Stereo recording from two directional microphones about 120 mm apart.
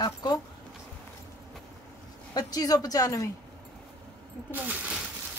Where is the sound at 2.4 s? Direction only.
30° left (ahead or behind).